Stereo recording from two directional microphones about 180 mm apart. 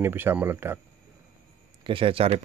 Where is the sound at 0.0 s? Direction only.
10° right (ahead or behind).